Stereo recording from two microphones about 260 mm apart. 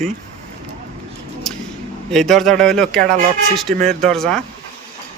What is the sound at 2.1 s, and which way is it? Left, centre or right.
Speech, centre.